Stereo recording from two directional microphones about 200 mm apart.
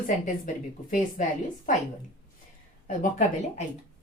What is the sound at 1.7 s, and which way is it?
Speech, 40° left (ahead or behind).